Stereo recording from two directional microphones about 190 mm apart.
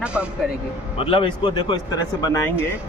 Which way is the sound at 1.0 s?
30° left (ahead or behind).